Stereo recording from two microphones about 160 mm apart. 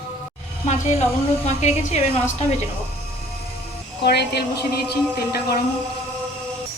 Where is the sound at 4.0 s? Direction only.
90° left.